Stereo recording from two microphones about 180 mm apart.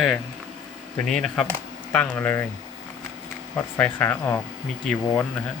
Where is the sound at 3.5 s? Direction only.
10° left (ahead or behind).